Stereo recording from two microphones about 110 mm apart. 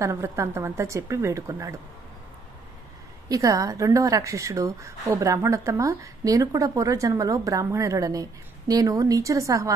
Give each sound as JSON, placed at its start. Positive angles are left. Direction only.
{"t": 0.0, "sound": "a woman's voice", "side_deg": -25}
{"t": 3.3, "sound": "a woman's voice", "side_deg": -30}